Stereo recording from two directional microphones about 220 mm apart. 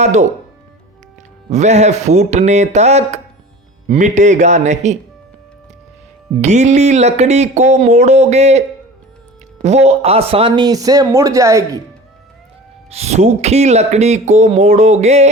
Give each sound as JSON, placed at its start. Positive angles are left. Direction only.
{"t": 0.0, "sound": "speech", "side_deg": -30}
{"t": 1.5, "sound": "speech", "side_deg": -30}
{"t": 6.4, "sound": "speech", "side_deg": -30}
{"t": 9.6, "sound": "speech", "side_deg": -30}
{"t": 12.9, "sound": "speech", "side_deg": -30}